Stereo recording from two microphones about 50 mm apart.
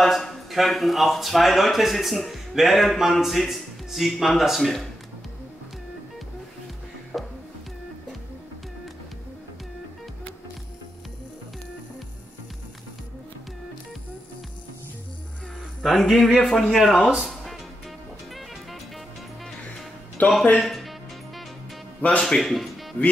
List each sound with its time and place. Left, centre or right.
0.0 s speech: centre
7.1 s music: centre
15.8 s speech: centre
17.2 s music: centre
20.2 s speech: left
20.5 s speech: centre
22.2 s a man's voice: centre